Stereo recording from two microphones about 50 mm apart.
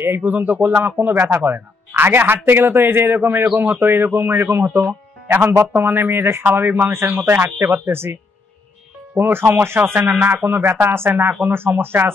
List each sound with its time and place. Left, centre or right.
0.2 s speech: right
5.4 s speech: right
5.9 s speech: right
9.2 s speech: right